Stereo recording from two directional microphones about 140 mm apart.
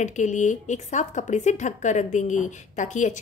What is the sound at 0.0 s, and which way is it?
Speech, 60° left (ahead or behind).